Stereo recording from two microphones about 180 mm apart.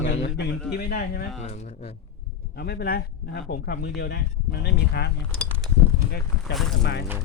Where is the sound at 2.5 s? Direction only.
60° left (ahead or behind).